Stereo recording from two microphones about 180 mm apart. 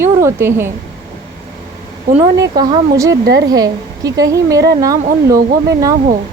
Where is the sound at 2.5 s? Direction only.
20° right (ahead or behind).